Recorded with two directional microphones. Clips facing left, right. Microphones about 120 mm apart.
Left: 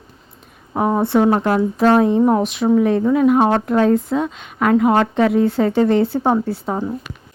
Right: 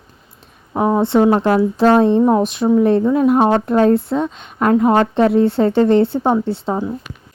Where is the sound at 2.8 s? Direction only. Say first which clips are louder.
Right 2 dB; 35° right (ahead or behind).